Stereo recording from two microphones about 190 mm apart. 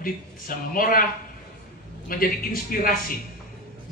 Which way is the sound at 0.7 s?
45° left (ahead or behind).